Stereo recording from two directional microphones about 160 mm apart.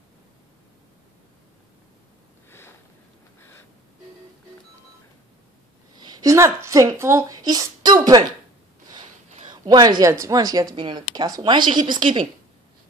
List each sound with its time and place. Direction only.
3.3 s a sound: 15° left (ahead or behind)
5.9 s speech: 25° right (ahead or behind)
9.5 s speech: 25° right (ahead or behind)